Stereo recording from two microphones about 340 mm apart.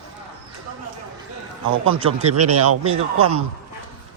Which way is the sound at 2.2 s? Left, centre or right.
Right.